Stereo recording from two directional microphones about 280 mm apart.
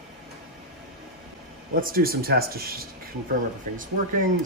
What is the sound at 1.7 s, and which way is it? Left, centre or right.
Speech, right.